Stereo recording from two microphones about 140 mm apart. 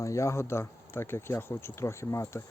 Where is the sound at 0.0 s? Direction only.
20° left (ahead or behind).